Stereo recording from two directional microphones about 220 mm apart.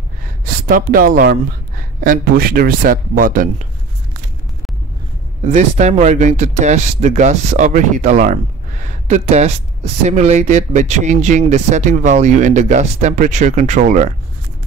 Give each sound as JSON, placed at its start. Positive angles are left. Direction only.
{"t": 0.7, "sound": "speech", "side_deg": -40}
{"t": 5.4, "sound": "speech", "side_deg": -35}